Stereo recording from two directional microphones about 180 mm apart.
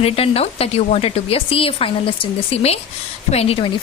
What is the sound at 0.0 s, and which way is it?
A woman's voice, 35° left (ahead or behind).